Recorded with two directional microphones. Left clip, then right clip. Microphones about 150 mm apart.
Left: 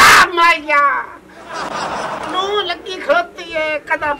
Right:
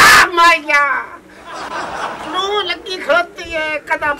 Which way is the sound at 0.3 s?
Centre (ahead or behind).